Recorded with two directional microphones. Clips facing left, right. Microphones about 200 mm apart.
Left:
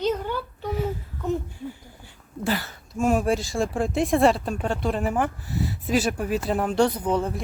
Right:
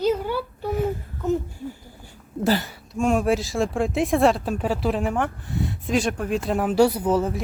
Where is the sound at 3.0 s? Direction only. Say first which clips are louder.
Right 1 dB; centre (ahead or behind).